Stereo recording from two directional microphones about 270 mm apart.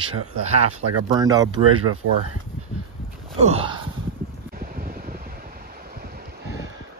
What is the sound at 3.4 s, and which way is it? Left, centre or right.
Speech, right.